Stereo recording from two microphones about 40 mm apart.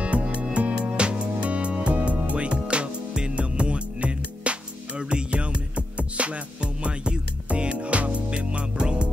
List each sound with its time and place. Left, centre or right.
0.0 s music: right